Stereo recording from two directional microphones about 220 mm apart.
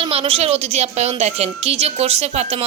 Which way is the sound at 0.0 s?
25° right (ahead or behind).